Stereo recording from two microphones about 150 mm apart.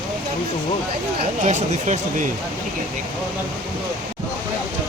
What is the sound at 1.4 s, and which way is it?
Speech, 55° right (ahead or behind).